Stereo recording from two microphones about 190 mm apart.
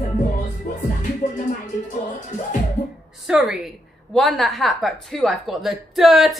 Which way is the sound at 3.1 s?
Centre (ahead or behind).